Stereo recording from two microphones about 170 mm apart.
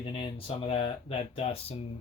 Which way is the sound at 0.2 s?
30° left (ahead or behind).